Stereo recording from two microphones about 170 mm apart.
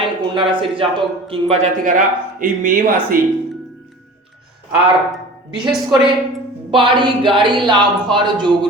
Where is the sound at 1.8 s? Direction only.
50° right (ahead or behind).